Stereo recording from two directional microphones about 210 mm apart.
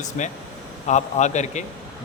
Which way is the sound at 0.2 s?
35° left (ahead or behind).